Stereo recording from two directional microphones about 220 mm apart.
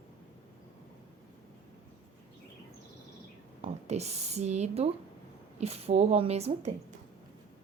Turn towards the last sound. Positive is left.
turn(degrees=-30)  # may be behind; listen again after turning